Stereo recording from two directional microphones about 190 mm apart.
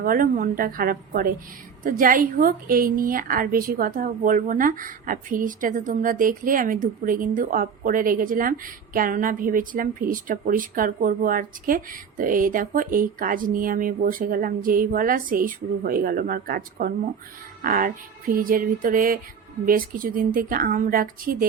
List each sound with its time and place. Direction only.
0.0 s a woman's voice: 50° right (ahead or behind)